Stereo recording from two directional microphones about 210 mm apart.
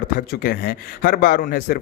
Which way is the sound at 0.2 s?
45° left (ahead or behind).